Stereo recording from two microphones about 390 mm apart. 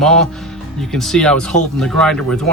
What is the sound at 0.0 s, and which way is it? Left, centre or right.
Speech, centre.